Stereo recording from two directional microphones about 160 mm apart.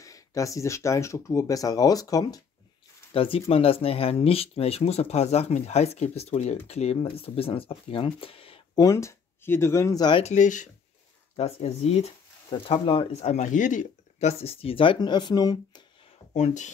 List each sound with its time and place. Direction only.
0.0 s speech: 20° left (ahead or behind)
3.1 s speech: 35° left (ahead or behind)
8.7 s speech: 20° left (ahead or behind)
10.2 s speech: 50° left (ahead or behind)
11.3 s speech: 40° left (ahead or behind); by 15.8 s 25° left (ahead or behind)
16.3 s speech: 50° left (ahead or behind)